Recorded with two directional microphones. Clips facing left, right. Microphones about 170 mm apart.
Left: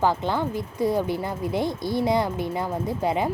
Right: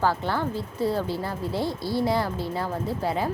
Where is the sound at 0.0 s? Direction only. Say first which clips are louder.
Left 2 dB; 15° left (ahead or behind).